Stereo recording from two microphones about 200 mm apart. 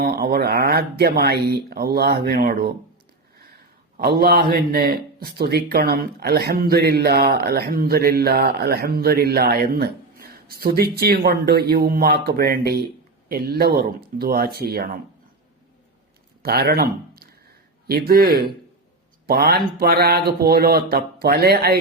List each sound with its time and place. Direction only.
0.0 s a man's voice: 50° right (ahead or behind)
3.9 s a man's voice: 50° right (ahead or behind)
16.4 s a man's voice: 50° right (ahead or behind)